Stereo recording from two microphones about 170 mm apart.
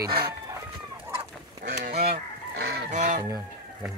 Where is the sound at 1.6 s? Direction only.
80° right.